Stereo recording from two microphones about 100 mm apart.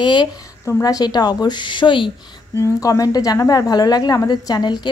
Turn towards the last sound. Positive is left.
turn(degrees=45)  # may be behind; listen again after turning